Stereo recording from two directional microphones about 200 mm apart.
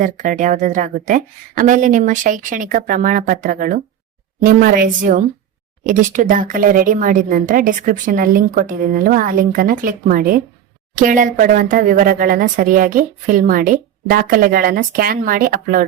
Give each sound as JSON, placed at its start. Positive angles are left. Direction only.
{"t": 0.0, "sound": "a woman's voice", "side_deg": -40}